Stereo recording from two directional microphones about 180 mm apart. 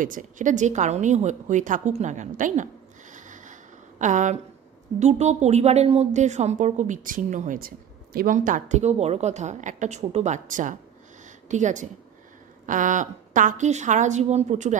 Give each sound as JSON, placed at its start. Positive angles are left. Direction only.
{"t": 0.0, "sound": "a woman's voice", "side_deg": -45}